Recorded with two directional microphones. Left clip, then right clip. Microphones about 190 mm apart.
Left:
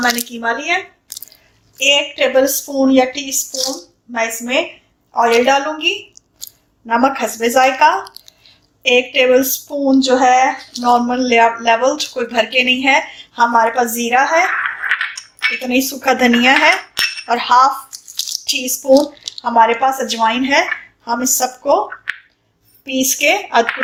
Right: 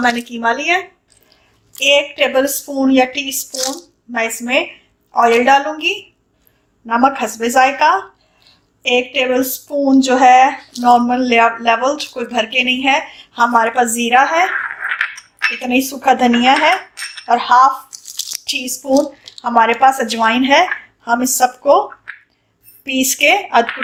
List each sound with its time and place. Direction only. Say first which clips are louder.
0.0 s a woman's voice: right 1 dB; 25° right (ahead or behind)
1.8 s a woman's voice: right 1 dB; 15° right (ahead or behind)
18.1 s a sound: left 2 dB; 5° right (ahead or behind)
19.5 s speech: left 1 dB; 15° right (ahead or behind)
19.8 s a woman's voice: right 3 dB; 25° right (ahead or behind)